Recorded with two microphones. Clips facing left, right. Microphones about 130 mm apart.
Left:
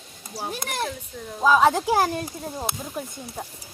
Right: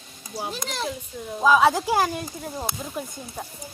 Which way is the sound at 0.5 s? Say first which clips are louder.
Left 4 dB; 55° left (ahead or behind).